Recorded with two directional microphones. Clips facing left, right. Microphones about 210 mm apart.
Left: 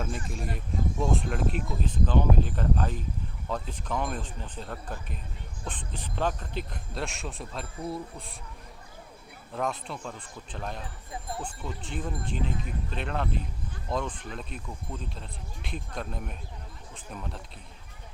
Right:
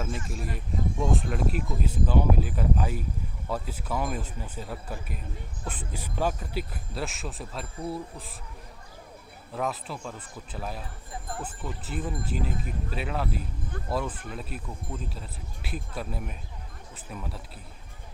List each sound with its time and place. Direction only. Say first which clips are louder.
0.0 s speech: even; centre (ahead or behind)
9.5 s speech: even; 5° right (ahead or behind)